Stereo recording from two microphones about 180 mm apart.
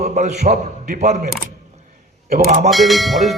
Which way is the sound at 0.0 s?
40° right (ahead or behind).